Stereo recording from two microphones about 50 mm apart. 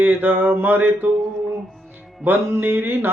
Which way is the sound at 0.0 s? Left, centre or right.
Right.